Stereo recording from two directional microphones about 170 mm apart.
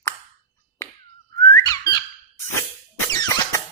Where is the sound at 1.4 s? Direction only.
20° left (ahead or behind).